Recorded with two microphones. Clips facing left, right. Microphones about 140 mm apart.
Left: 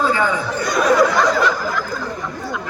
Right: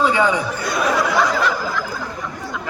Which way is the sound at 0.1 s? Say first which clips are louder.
Right 1 dB; 15° right (ahead or behind).